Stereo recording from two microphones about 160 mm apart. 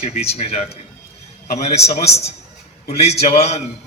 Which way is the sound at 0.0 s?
40° left (ahead or behind).